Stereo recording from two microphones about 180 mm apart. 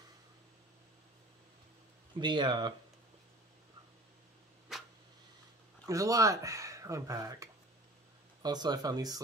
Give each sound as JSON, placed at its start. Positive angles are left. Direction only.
{"t": 2.1, "sound": "speech", "side_deg": -25}
{"t": 4.7, "sound": "a sound", "side_deg": 0}
{"t": 5.9, "sound": "speech", "side_deg": -20}